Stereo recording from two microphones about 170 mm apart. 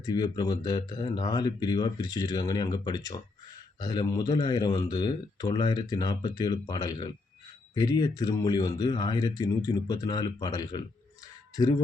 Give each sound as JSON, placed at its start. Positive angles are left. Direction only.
{"t": 0.0, "sound": "speech", "side_deg": 25}